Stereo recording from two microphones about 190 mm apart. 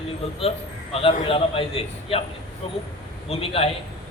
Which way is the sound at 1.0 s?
30° left (ahead or behind).